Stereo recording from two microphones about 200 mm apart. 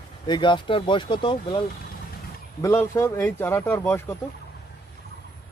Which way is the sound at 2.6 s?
15° left (ahead or behind).